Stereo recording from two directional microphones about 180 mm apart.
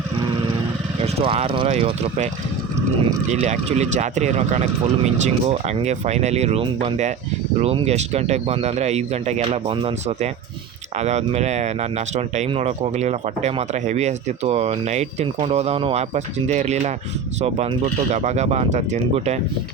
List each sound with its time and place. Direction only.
1.0 s speech: 35° right (ahead or behind)